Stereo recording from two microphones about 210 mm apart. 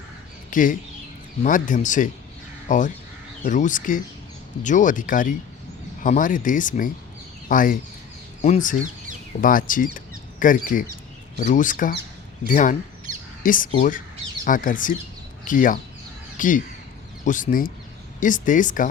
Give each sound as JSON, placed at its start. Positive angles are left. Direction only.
{"t": 0.5, "sound": "speech", "side_deg": 40}